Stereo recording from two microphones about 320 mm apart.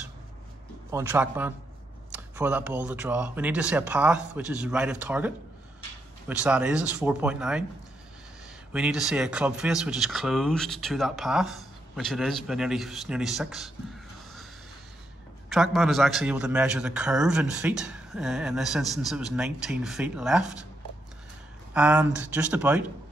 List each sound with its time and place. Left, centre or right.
0.9 s a man's voice: centre
8.7 s a man's voice: centre
15.5 s a man's voice: centre
21.7 s a man's voice: centre